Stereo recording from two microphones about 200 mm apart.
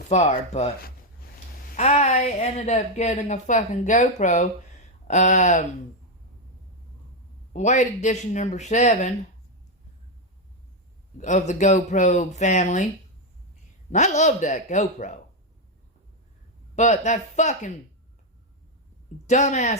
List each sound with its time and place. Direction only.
0.1 s speech: 35° left (ahead or behind)
1.7 s speech: 35° left (ahead or behind)
7.5 s speech: 35° left (ahead or behind)
11.2 s speech: 35° left (ahead or behind)
13.9 s speech: 35° left (ahead or behind)
16.7 s speech: 35° left (ahead or behind)
19.3 s speech: 35° left (ahead or behind)